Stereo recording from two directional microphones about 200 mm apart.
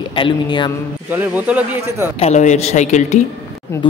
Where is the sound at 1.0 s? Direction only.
10° right (ahead or behind).